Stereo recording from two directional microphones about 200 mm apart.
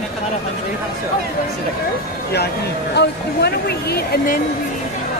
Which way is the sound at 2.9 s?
55° left (ahead or behind).